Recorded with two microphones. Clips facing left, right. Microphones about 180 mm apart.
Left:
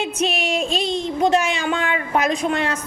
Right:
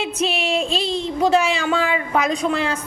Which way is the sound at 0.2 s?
30° right (ahead or behind).